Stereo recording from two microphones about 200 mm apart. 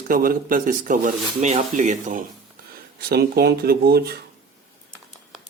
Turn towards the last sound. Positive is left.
turn(degrees=-50)  # may be behind; listen again after turning